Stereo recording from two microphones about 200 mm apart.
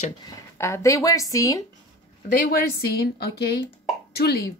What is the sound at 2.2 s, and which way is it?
Speech, 45° left (ahead or behind).